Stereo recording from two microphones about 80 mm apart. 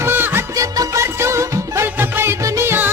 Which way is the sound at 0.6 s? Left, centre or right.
Right.